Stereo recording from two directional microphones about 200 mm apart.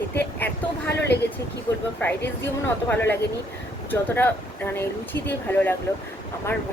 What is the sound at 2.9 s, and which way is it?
Speech, 10° left (ahead or behind).